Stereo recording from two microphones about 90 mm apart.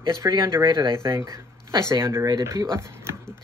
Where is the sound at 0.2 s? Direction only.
30° right (ahead or behind).